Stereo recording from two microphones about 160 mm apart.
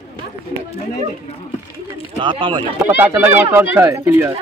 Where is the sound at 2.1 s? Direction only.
30° right (ahead or behind).